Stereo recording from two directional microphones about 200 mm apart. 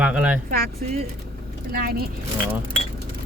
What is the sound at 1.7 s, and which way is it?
Speech, 50° right (ahead or behind).